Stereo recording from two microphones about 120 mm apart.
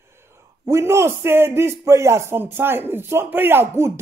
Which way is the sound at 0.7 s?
25° right (ahead or behind).